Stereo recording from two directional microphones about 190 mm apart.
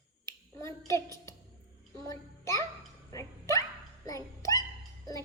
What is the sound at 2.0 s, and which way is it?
Speech, 15° left (ahead or behind).